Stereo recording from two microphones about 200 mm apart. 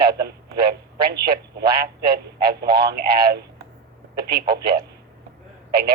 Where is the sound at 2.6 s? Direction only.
50° right (ahead or behind).